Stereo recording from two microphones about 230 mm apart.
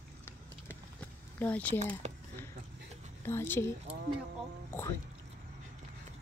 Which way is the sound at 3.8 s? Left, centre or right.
Right.